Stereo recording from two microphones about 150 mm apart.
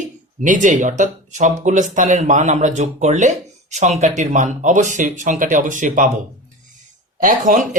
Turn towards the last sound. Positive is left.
turn(degrees=-60)  # may be behind; listen again after turning